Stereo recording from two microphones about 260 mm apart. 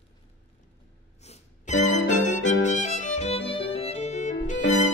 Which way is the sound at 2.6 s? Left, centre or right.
Left.